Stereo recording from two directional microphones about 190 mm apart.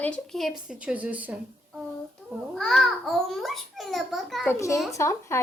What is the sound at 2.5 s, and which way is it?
A woman's voice, centre (ahead or behind).